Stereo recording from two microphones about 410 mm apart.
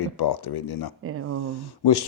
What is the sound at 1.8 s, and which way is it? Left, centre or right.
Speech, left.